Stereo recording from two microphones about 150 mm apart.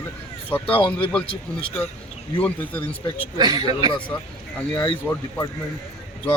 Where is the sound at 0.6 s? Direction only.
35° left (ahead or behind).